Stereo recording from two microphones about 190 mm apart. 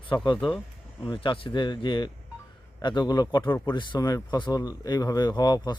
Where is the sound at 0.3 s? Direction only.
Centre (ahead or behind).